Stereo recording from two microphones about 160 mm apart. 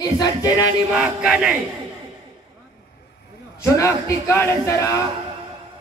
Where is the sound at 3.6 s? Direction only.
15° left (ahead or behind).